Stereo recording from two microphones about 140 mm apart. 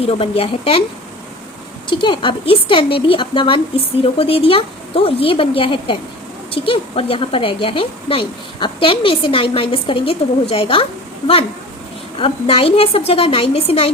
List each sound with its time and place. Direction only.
0.0 s a woman's voice: 45° left (ahead or behind)
1.9 s speech: 35° left (ahead or behind)
12.1 s a woman's voice: 40° left (ahead or behind)